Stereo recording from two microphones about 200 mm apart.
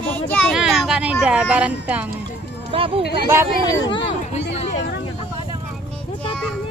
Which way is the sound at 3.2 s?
15° right (ahead or behind).